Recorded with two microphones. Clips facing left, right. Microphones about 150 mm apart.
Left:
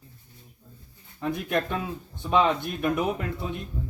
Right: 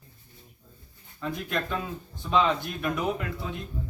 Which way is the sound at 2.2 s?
20° left (ahead or behind).